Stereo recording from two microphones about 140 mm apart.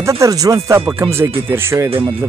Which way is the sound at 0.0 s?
20° right (ahead or behind).